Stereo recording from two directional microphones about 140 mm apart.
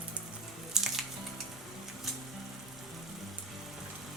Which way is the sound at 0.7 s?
5° right (ahead or behind).